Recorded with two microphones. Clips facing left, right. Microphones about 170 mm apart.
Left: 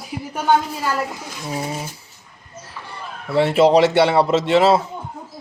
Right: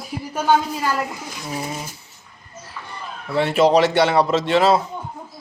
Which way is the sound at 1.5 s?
30° left (ahead or behind).